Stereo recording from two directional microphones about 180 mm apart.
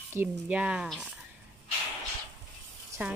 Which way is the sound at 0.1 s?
10° right (ahead or behind).